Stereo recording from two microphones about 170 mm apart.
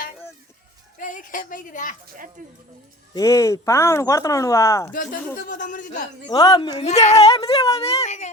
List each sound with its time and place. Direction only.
0.9 s a woman's voice: 50° left (ahead or behind)
2.4 s speech: 55° right (ahead or behind)
3.2 s speech: 20° left (ahead or behind)
4.9 s speech: 55° left (ahead or behind)
6.2 s speech: 25° left (ahead or behind); by 8.3 s 40° left (ahead or behind)